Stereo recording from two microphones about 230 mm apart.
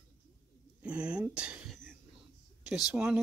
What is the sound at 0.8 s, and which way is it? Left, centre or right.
Speech, centre.